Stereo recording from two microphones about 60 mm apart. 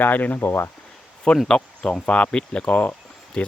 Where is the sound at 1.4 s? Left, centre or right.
Centre; by 3.0 s left.